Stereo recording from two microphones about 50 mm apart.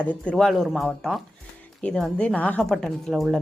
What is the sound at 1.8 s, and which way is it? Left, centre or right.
Speech, left.